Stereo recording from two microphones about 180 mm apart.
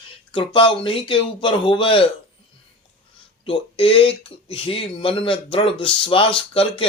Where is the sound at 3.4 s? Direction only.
30° left (ahead or behind).